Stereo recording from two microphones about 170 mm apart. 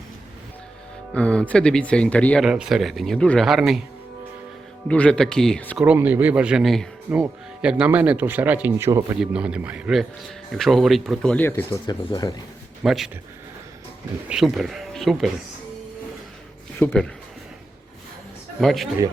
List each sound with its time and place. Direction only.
1.1 s speech: 5° left (ahead or behind)
4.9 s speech: 5° left (ahead or behind)
5.7 s speech: 10° right (ahead or behind); by 12.3 s 20° left (ahead or behind)
12.8 s speech: centre (ahead or behind)
14.3 s speech: 5° right (ahead or behind)
16.8 s speech: 10° left (ahead or behind)
18.6 s speech: centre (ahead or behind)